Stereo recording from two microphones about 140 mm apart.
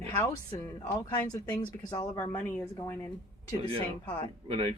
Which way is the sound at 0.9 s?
25° left (ahead or behind).